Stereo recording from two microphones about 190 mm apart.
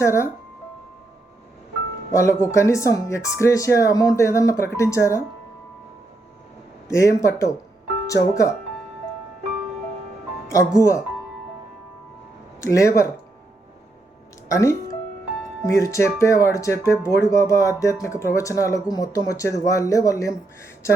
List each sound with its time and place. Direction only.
0.0 s speech: 15° left (ahead or behind)
2.1 s speech: 15° left (ahead or behind)
6.8 s speech: 15° left (ahead or behind)
10.5 s speech: 15° left (ahead or behind)
12.5 s speech: 15° left (ahead or behind)
14.5 s speech: 15° left (ahead or behind)